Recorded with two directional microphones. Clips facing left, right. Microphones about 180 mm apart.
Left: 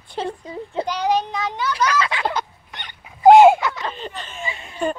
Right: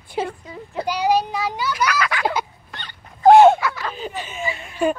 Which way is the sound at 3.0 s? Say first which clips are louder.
Left 2 dB; 5° left (ahead or behind).